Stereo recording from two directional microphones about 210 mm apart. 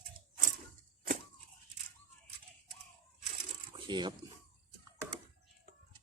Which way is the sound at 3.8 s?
20° right (ahead or behind).